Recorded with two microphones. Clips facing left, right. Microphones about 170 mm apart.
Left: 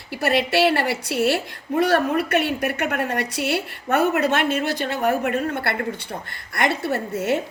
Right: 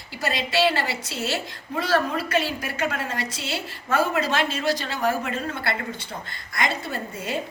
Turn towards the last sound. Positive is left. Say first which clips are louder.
# left 7 dB
turn(degrees=70)  # may be behind; listen again after turning